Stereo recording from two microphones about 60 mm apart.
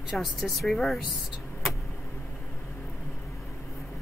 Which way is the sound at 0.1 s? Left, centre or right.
Centre.